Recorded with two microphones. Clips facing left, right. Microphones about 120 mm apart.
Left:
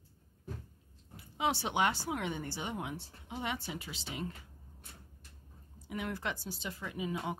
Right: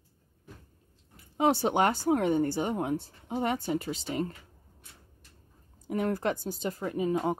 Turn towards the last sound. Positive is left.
turn(degrees=-45)  # may be behind; listen again after turning